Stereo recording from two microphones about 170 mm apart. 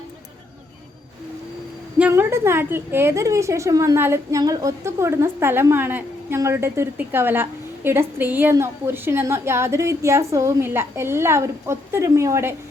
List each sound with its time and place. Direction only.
2.0 s a woman's voice: 10° right (ahead or behind)